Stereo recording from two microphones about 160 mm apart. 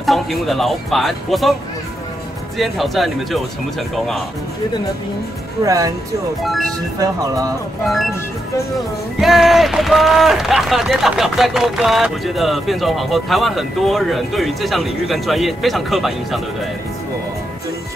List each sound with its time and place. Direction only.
0.0 s speech: centre (ahead or behind)
2.5 s speech: centre (ahead or behind)
5.6 s speech: 20° right (ahead or behind)
6.4 s speech: centre (ahead or behind)
7.8 s speech: centre (ahead or behind)
9.2 s speech: centre (ahead or behind)